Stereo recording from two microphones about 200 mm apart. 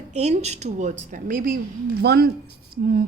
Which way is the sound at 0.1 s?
35° right (ahead or behind).